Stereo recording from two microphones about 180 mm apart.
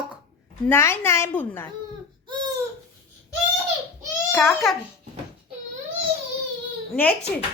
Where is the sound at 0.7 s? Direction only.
15° left (ahead or behind).